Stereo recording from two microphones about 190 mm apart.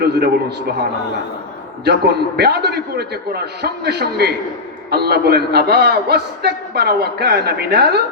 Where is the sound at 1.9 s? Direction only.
60° right (ahead or behind).